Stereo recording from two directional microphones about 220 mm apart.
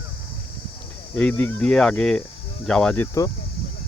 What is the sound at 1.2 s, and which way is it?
Speech, 5° left (ahead or behind).